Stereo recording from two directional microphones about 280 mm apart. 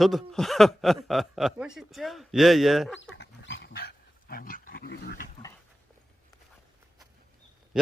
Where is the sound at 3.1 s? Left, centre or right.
Left.